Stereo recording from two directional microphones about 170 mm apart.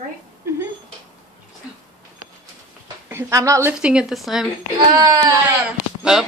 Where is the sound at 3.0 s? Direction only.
15° right (ahead or behind).